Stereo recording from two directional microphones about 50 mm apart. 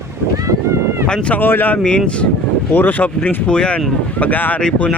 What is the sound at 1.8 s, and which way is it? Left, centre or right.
Speech, left.